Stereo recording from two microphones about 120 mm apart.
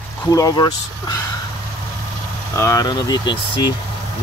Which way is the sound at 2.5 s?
25° left (ahead or behind).